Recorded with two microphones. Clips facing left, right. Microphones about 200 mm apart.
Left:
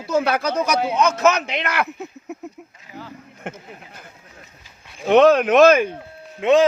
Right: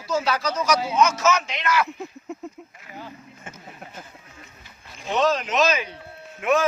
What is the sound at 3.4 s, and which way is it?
Speech, 65° left (ahead or behind).